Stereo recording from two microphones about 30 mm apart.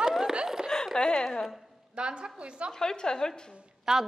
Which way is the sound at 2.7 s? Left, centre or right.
Left.